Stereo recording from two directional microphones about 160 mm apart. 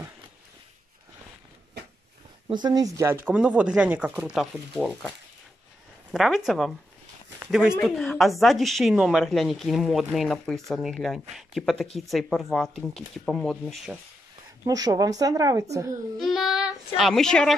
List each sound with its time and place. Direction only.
2.4 s speech: 25° right (ahead or behind)
3.3 s a woman's voice: 5° right (ahead or behind)
6.1 s a woman's voice: centre (ahead or behind)
7.8 s a woman's voice: centre (ahead or behind)
14.7 s speech: 25° right (ahead or behind)
16.2 s child singing: centre (ahead or behind)